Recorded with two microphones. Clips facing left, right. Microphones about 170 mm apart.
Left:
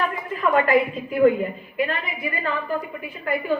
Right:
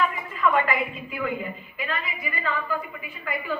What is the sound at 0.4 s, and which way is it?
A woman's voice, 45° left (ahead or behind).